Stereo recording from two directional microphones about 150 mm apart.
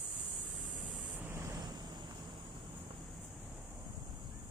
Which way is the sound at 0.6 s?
5° right (ahead or behind).